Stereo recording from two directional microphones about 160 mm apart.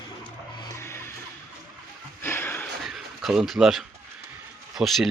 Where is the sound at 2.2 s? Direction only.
15° left (ahead or behind).